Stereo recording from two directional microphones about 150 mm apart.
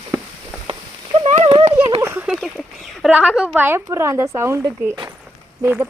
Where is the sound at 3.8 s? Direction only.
20° right (ahead or behind).